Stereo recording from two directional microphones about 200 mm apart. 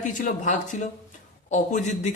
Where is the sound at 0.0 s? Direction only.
40° left (ahead or behind).